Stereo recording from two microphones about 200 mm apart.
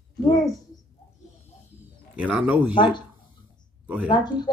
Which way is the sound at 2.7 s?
25° left (ahead or behind).